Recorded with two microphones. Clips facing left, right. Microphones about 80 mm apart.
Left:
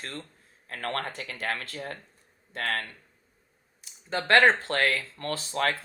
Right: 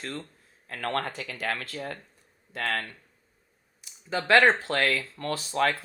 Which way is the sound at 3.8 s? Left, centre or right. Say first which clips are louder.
Right 1 dB; left.